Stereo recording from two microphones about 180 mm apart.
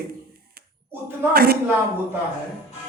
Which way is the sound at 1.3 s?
60° right (ahead or behind).